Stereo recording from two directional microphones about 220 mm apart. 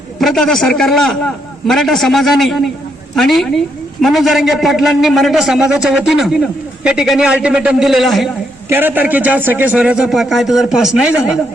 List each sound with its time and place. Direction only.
0.2 s a man's voice: centre (ahead or behind)